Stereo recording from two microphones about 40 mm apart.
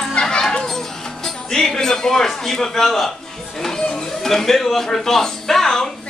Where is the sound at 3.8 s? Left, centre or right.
Left.